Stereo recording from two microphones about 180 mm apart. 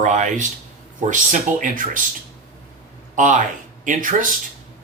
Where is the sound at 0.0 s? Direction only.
45° right (ahead or behind).